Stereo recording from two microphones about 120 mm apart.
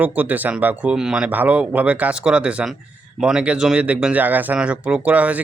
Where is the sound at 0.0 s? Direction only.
15° right (ahead or behind).